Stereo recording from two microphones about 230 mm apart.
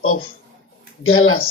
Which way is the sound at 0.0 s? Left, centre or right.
Left.